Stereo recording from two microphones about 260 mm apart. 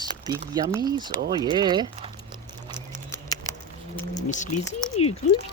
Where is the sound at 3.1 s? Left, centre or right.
Centre.